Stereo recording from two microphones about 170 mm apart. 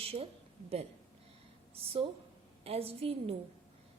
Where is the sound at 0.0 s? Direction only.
35° right (ahead or behind).